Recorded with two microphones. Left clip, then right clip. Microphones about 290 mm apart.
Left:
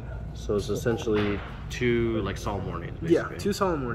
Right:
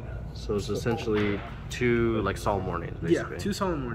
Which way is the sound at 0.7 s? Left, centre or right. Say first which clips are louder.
Left 2 dB; right.